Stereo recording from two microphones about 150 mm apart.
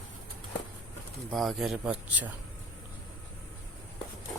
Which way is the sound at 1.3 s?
Centre (ahead or behind).